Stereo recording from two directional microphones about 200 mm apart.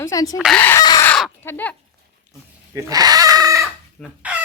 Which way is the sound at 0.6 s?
15° left (ahead or behind).